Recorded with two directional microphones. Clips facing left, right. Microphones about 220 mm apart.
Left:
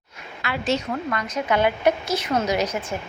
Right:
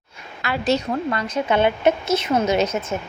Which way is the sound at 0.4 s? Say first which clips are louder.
Right 3 dB; 40° right (ahead or behind).